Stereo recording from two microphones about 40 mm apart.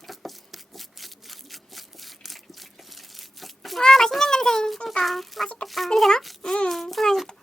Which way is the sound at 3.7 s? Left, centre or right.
Centre.